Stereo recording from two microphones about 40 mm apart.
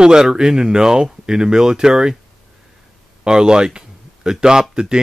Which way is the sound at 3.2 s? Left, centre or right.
Centre.